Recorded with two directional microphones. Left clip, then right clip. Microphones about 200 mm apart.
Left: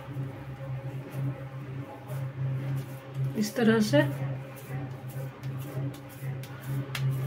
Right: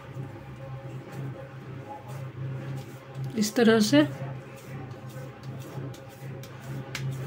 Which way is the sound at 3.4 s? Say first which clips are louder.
Right 4 dB; 40° right (ahead or behind).